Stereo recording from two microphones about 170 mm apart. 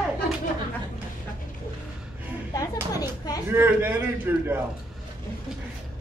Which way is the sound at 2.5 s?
20° left (ahead or behind).